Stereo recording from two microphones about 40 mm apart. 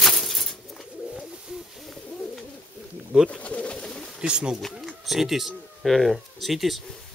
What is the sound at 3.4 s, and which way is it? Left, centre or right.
Pigeon, left.